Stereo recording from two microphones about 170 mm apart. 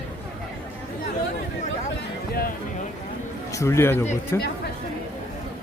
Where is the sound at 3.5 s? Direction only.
15° left (ahead or behind).